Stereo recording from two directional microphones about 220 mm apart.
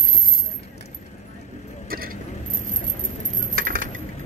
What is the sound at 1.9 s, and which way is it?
Vehicle, 40° right (ahead or behind).